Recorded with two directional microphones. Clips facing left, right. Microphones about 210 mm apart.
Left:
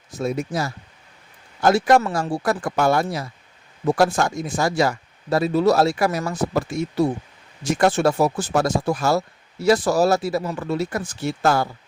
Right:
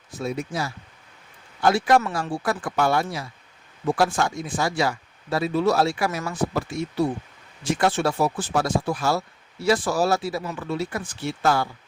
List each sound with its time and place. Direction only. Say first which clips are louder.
0.1 s speech: left 4 dB; 45° left (ahead or behind)